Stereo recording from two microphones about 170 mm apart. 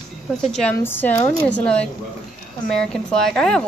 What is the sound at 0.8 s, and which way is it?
Speech, 15° left (ahead or behind).